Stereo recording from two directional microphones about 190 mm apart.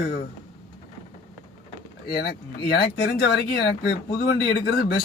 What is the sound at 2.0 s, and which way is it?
Speech, 55° left (ahead or behind).